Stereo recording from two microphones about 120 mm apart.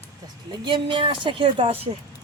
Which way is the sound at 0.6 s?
40° right (ahead or behind).